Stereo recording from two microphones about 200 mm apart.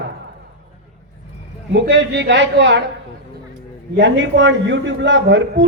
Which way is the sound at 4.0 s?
65° right (ahead or behind).